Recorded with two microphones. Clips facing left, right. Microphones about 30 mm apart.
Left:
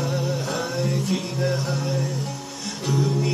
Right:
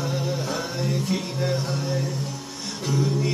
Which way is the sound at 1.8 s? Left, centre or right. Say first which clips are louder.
Left 1 dB; centre.